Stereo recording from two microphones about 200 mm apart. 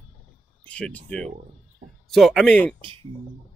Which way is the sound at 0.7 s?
5° left (ahead or behind).